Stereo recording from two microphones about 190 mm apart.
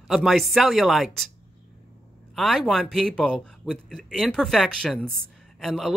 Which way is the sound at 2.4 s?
Centre (ahead or behind).